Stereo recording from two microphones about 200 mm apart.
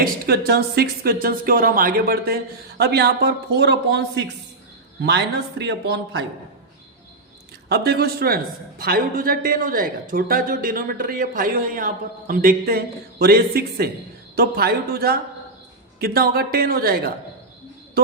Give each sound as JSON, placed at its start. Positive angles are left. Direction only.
{"t": 0.0, "sound": "a man's voice", "side_deg": -50}
{"t": 7.7, "sound": "a man's voice", "side_deg": -50}